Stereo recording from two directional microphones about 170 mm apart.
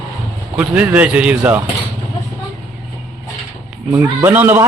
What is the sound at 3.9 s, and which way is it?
Speech, 15° right (ahead or behind).